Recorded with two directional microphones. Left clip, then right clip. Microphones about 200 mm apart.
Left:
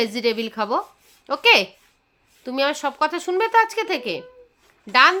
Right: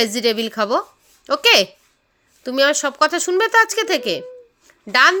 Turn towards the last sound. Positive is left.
turn(degrees=-15)  # may be behind; listen again after turning